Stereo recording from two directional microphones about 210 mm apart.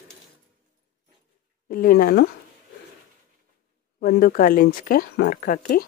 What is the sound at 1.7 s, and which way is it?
Speech, 40° left (ahead or behind).